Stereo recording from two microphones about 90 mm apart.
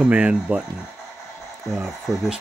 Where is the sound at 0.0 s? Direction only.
10° right (ahead or behind).